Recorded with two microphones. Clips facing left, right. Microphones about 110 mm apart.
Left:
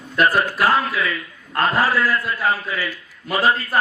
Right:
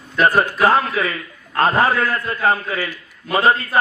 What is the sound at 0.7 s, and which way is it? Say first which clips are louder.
A man's voice: right 2 dB; 40° right (ahead or behind).